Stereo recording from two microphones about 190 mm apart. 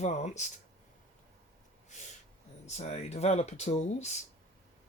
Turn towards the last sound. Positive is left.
turn(degrees=35)  # may be behind; listen again after turning